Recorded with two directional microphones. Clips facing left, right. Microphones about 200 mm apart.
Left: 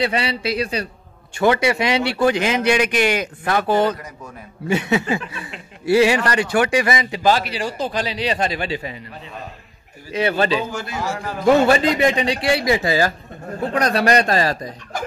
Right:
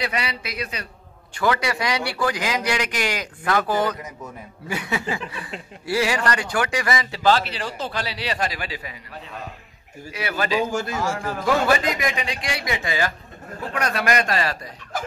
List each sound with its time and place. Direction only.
0.0 s speech: 30° left (ahead or behind)
10.1 s speech: 30° left (ahead or behind)
10.7 s a man's voice: 45° right (ahead or behind)
11.4 s a man's voice: 25° left (ahead or behind)